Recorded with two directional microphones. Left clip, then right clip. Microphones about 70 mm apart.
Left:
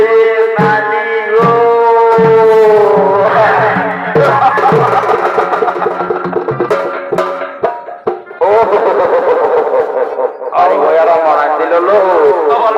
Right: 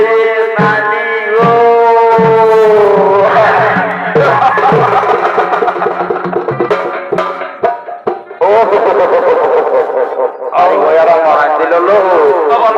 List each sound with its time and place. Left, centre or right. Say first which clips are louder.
0.0 s music: left 1 dB; left
8.4 s music: right 1 dB; left
10.6 s radio: right 1 dB; left